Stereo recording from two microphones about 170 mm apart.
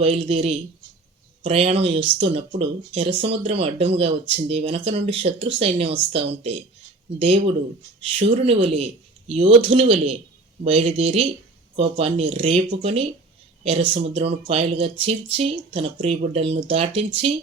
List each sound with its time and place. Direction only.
0.0 s speech: 35° right (ahead or behind)